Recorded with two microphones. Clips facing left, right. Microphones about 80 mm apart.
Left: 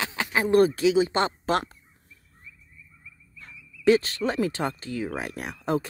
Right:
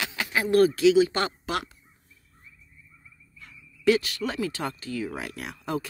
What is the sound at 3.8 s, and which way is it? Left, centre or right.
Speech, left.